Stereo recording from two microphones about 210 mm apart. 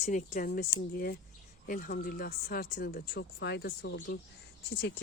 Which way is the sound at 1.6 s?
40° left (ahead or behind).